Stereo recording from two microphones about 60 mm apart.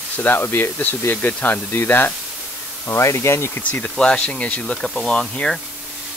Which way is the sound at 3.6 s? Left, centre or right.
Left.